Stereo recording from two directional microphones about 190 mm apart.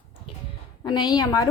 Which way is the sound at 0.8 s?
25° left (ahead or behind).